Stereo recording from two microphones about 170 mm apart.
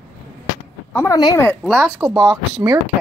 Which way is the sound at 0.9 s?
15° left (ahead or behind).